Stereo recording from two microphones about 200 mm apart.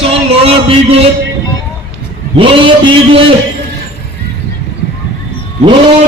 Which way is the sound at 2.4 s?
25° right (ahead or behind).